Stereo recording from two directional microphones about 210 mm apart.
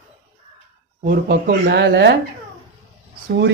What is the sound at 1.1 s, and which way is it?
A man's voice, 45° right (ahead or behind).